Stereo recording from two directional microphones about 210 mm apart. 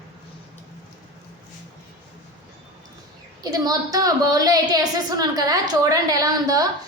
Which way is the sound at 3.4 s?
20° right (ahead or behind).